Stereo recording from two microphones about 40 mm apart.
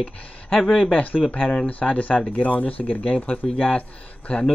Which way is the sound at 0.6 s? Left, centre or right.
Centre.